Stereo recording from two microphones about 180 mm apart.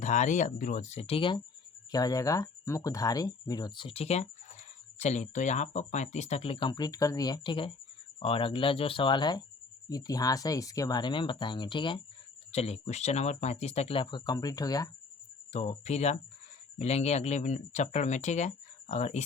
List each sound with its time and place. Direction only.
0.0 s speech: 40° left (ahead or behind); by 14.8 s 20° left (ahead or behind)
15.5 s speech: 35° left (ahead or behind)